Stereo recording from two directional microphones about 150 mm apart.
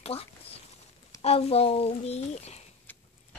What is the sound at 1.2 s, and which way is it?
A child's voice, 40° left (ahead or behind).